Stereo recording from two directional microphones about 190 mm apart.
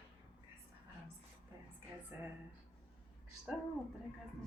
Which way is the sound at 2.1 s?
10° right (ahead or behind).